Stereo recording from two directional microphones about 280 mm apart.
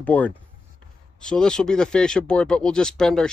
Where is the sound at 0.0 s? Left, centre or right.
Centre.